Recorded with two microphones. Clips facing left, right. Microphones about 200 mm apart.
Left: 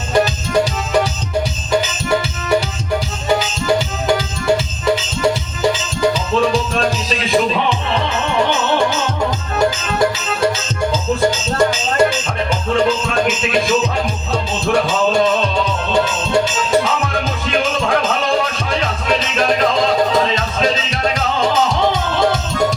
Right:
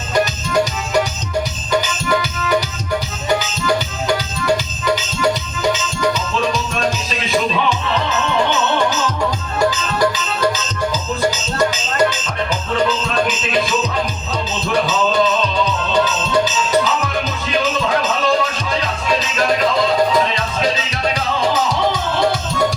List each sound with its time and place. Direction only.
9.6 s music: 25° left (ahead or behind)